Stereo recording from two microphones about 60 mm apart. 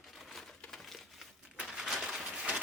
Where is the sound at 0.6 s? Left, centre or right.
Centre.